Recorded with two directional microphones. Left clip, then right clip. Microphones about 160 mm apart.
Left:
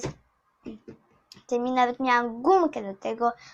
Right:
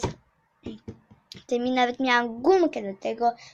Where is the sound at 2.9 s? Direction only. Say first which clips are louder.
Right 1 dB; 15° right (ahead or behind).